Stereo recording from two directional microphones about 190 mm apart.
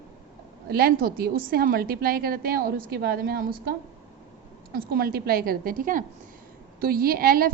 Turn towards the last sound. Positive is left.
turn(degrees=-50)  # may be behind; listen again after turning